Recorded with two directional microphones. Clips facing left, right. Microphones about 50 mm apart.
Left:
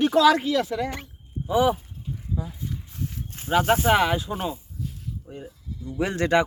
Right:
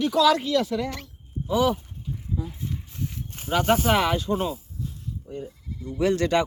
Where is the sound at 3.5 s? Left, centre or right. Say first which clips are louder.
Left 1 dB; centre.